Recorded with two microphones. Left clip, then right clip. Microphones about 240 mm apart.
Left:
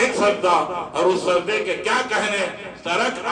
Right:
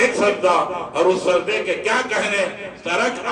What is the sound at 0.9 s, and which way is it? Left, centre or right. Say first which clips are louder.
A man's voice: right 2 dB; left.